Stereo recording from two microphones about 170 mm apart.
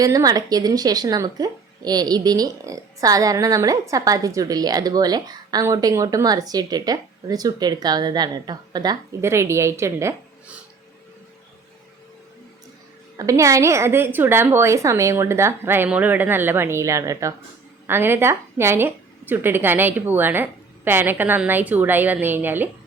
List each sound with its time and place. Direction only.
0.0 s a woman's voice: 20° right (ahead or behind)
13.1 s a woman's voice: 20° right (ahead or behind)